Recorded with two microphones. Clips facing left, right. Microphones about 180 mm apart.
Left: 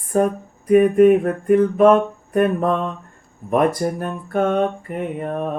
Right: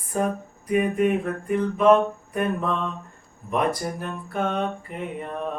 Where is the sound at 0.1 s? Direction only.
50° left (ahead or behind).